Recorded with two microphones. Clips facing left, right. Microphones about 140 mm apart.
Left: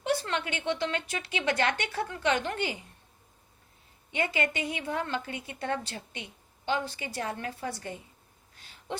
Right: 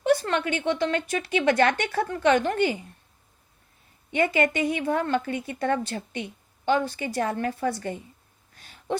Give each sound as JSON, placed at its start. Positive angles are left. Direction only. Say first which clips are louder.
{"t": 0.0, "sound": "a woman's voice", "louder": "right 7 dB", "side_deg": -50}
{"t": 4.1, "sound": "a woman's voice", "louder": "right 7 dB", "side_deg": -55}
{"t": 8.5, "sound": "a sound", "louder": "right 8 dB", "side_deg": -50}